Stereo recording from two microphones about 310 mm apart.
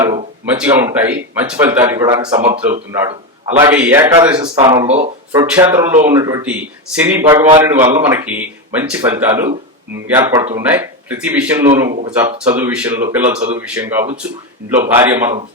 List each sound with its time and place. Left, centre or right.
0.0 s speech: centre
2.7 s a man's voice: centre
3.8 s speech: centre